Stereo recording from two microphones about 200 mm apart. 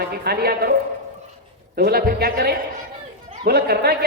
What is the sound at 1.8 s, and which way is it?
Speech, 50° right (ahead or behind).